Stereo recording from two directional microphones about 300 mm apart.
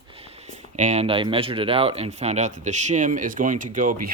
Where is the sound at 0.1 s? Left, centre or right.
Centre.